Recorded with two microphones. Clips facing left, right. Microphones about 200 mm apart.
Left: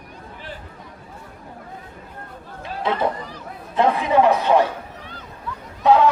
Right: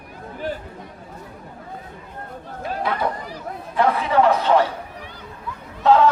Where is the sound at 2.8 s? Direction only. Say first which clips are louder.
Left 3 dB; 25° left (ahead or behind).